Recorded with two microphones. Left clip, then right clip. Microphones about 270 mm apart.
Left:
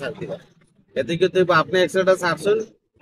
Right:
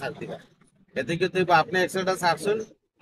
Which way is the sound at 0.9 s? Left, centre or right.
Centre.